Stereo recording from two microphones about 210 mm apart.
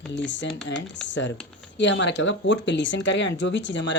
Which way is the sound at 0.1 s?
60° left (ahead or behind).